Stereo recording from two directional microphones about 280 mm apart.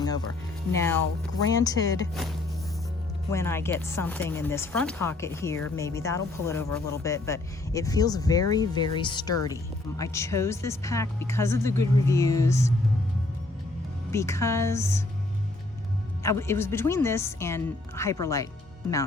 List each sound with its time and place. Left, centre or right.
0.7 s speech: centre
3.3 s speech: centre
14.1 s speech: centre
16.2 s speech: centre